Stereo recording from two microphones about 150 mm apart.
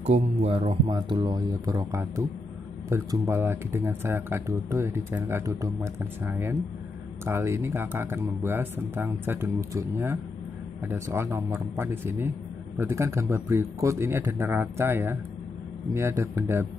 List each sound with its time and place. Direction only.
0.0 s speech: 45° right (ahead or behind); by 16.6 s 20° right (ahead or behind)